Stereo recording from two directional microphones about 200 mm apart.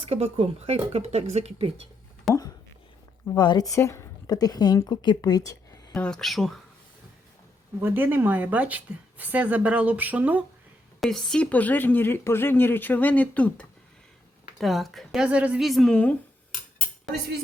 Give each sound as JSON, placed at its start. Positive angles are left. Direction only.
{"t": 0.1, "sound": "speech", "side_deg": -30}
{"t": 2.3, "sound": "a sound", "side_deg": 0}
{"t": 3.2, "sound": "speech", "side_deg": 20}
{"t": 5.9, "sound": "a woman's voice", "side_deg": 5}
{"t": 7.8, "sound": "a woman's voice", "side_deg": -10}
{"t": 11.0, "sound": "a woman's voice", "side_deg": 5}